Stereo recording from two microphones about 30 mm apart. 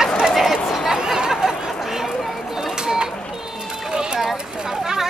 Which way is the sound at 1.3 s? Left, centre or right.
Centre.